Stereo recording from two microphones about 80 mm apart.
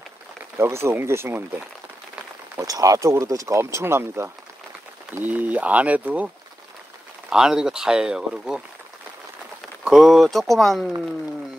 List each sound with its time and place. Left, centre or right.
0.6 s speech: right
2.6 s speech: right
5.1 s speech: right
9.8 s speech: centre